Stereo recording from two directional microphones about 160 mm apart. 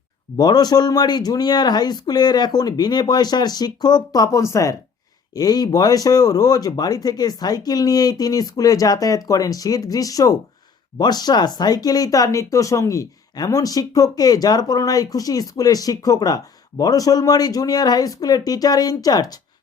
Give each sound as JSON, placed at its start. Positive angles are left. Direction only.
{"t": 0.3, "sound": "speech", "side_deg": 25}